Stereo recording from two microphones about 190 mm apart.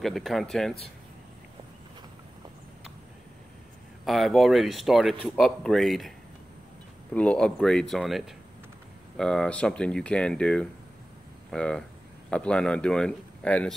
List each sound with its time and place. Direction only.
0.0 s speech: centre (ahead or behind)
4.0 s speech: centre (ahead or behind)
7.2 s speech: 5° left (ahead or behind)